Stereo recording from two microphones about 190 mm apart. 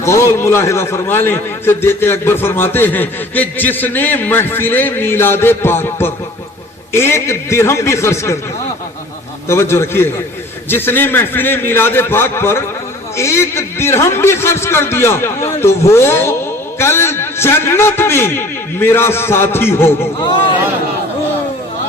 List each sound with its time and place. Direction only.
0.0 s a man's voice: 15° left (ahead or behind)
9.5 s a man's voice: 15° left (ahead or behind)